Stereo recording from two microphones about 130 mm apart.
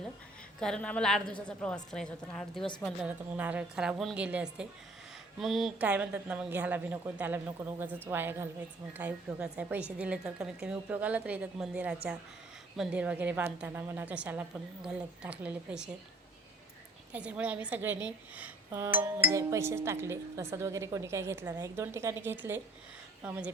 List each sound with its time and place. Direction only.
0.6 s a woman's voice: 5° left (ahead or behind)
3.0 s a woman's voice: 10° right (ahead or behind)
5.8 s a woman's voice: 10° right (ahead or behind)
17.1 s a woman's voice: 10° right (ahead or behind)